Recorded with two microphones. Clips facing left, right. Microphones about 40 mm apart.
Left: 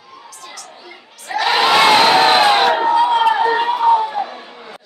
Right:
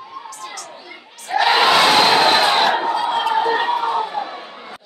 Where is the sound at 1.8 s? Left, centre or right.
Centre.